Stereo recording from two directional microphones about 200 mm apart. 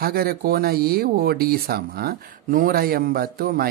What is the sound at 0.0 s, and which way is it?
Speech, 50° right (ahead or behind).